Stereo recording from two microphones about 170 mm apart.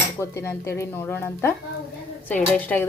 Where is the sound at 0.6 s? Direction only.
15° left (ahead or behind).